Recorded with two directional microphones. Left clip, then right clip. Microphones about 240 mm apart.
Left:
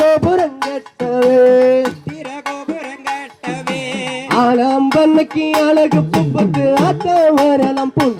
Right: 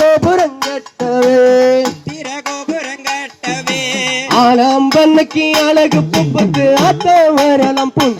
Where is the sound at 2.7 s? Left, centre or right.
Right.